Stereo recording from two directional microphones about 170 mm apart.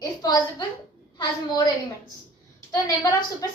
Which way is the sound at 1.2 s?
20° left (ahead or behind).